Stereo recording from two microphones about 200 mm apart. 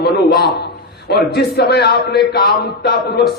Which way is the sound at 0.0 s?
55° left (ahead or behind).